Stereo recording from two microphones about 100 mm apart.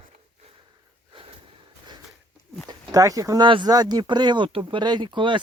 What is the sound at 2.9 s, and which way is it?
Speech, 35° right (ahead or behind).